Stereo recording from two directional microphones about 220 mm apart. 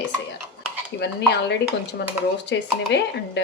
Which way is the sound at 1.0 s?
50° left (ahead or behind).